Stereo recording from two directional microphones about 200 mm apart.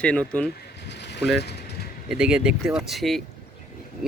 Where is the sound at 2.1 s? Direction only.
5° right (ahead or behind).